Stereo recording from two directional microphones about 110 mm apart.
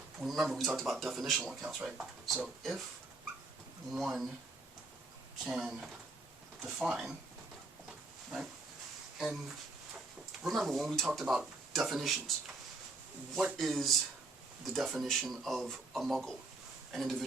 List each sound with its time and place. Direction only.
0.2 s speech: centre (ahead or behind)
3.9 s speech: centre (ahead or behind)
5.5 s speech: 5° right (ahead or behind)
9.1 s speech: 5° right (ahead or behind)
10.4 s speech: centre (ahead or behind)
13.3 s speech: centre (ahead or behind)